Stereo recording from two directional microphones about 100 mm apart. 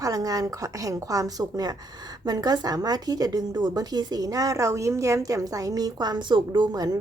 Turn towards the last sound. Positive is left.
turn(degrees=-40)  # may be behind; listen again after turning